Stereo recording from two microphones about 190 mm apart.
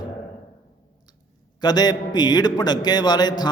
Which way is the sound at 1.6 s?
20° left (ahead or behind).